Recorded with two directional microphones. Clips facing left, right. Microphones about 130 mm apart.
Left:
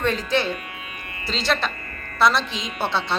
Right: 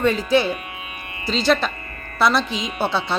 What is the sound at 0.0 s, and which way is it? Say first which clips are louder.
A woman's voice: right 4 dB; 5° right (ahead or behind).